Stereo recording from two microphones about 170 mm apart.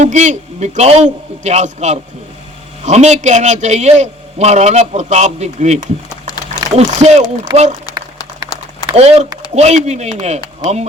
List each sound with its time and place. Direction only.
0.0 s a man's voice: 45° right (ahead or behind)
8.5 s a sound: 20° left (ahead or behind)
9.0 s speech: 40° right (ahead or behind)